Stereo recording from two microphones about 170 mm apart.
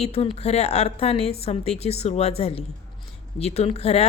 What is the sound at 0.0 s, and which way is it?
A woman's voice, 35° left (ahead or behind).